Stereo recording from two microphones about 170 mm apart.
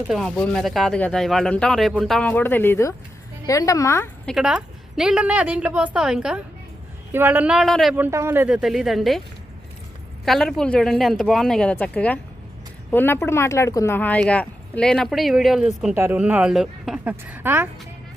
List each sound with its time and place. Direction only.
0.1 s a woman's voice: centre (ahead or behind)
4.3 s a woman's voice: 5° right (ahead or behind)
7.9 s speech: 15° right (ahead or behind)
10.2 s a woman's voice: centre (ahead or behind)